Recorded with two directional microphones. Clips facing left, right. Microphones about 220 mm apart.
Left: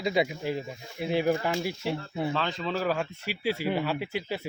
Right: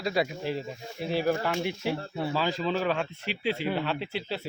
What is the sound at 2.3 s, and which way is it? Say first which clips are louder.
Speech: right 2 dB; 5° right (ahead or behind).